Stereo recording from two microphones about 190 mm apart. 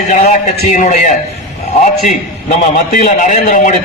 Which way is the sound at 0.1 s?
40° left (ahead or behind).